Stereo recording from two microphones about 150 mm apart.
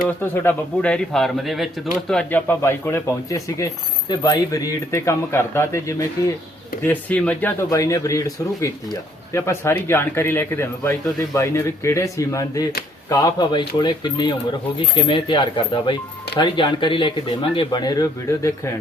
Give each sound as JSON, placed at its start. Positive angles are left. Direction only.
{"t": 0.2, "sound": "speech", "side_deg": 15}
{"t": 7.7, "sound": "speech", "side_deg": 20}